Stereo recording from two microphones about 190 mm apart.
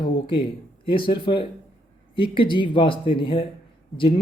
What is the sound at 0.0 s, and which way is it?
A man's voice, 25° left (ahead or behind).